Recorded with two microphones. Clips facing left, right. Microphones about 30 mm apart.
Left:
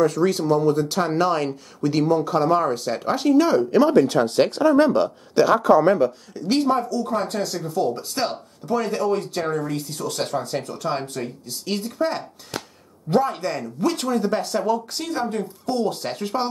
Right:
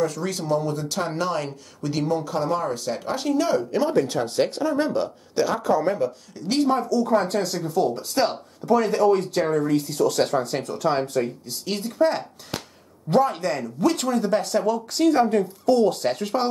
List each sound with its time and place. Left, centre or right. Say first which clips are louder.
0.0 s speech: left 6 dB; centre
6.3 s speech: right 2 dB; centre